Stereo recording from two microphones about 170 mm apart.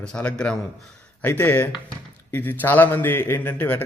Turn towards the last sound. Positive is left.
turn(degrees=10)  # may be behind; listen again after turning